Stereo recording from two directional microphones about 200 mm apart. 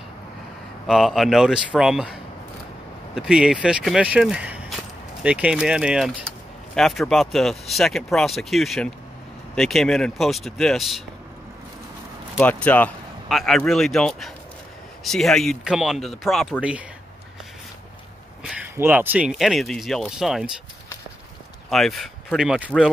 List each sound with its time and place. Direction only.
0.8 s speech: centre (ahead or behind)
3.2 s speech: 5° right (ahead or behind)
12.4 s speech: 5° left (ahead or behind)
18.4 s speech: 5° right (ahead or behind)
21.6 s speech: centre (ahead or behind)